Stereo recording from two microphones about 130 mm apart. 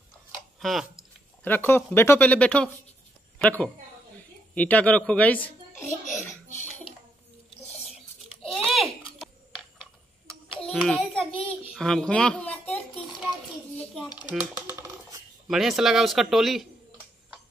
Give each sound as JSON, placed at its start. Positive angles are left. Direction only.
{"t": 0.6, "sound": "speech", "side_deg": 0}
{"t": 1.4, "sound": "speech", "side_deg": 15}
{"t": 8.4, "sound": "typing", "side_deg": 0}
{"t": 10.5, "sound": "a sound", "side_deg": 5}
{"t": 10.9, "sound": "a child's voice", "side_deg": 5}
{"t": 14.3, "sound": "speech", "side_deg": -5}
{"t": 14.8, "sound": "coin", "side_deg": -25}
{"t": 15.4, "sound": "speech", "side_deg": 0}